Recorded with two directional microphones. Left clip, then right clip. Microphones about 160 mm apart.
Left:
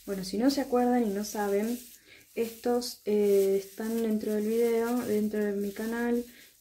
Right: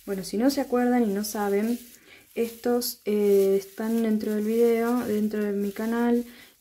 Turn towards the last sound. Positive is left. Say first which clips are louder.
# right 5 dB
turn(degrees=-30)  # may be behind; listen again after turning